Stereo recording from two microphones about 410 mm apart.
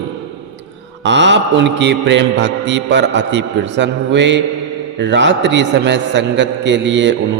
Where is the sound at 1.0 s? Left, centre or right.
Right.